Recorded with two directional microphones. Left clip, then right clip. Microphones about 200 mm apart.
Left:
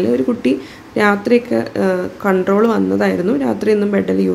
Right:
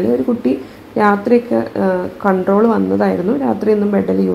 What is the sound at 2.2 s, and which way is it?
Speech, 20° left (ahead or behind).